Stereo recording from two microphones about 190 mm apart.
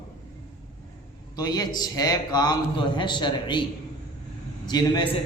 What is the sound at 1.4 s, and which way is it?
A man's voice, 20° left (ahead or behind).